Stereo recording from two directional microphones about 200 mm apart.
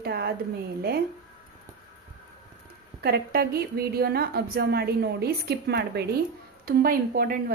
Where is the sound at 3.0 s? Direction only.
50° right (ahead or behind).